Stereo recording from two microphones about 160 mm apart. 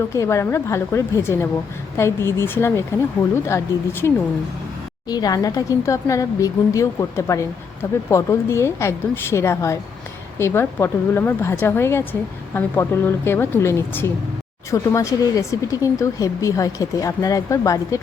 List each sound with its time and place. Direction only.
0.1 s a woman's voice: 20° left (ahead or behind)
5.0 s a woman's voice: 25° left (ahead or behind)